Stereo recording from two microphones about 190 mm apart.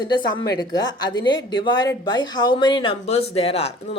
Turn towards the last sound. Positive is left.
turn(degrees=30)  # may be behind; listen again after turning